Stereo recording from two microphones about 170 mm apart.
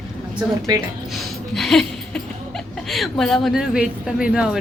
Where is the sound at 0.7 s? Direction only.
25° right (ahead or behind).